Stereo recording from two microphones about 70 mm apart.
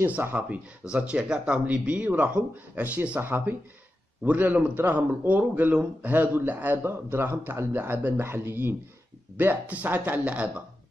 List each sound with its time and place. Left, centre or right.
0.0 s speech: right